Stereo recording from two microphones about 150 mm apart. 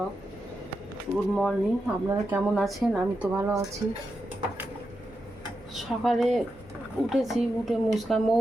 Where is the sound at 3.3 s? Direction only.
20° right (ahead or behind).